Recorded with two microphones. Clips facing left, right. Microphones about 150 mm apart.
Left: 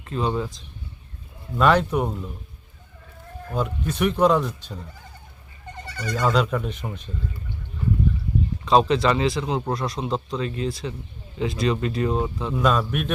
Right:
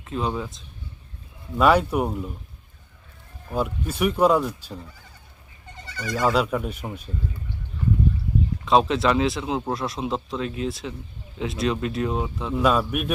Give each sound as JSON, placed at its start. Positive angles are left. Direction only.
{"t": 0.0, "sound": "speech", "side_deg": 0}
{"t": 3.5, "sound": "speech", "side_deg": -10}
{"t": 5.9, "sound": "speech", "side_deg": 45}
{"t": 6.1, "sound": "speech", "side_deg": -10}
{"t": 8.6, "sound": "speech", "side_deg": 0}